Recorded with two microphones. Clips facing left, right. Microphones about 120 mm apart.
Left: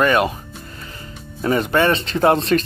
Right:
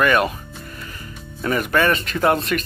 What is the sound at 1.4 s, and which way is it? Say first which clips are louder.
Speech: left 2 dB; 25° left (ahead or behind).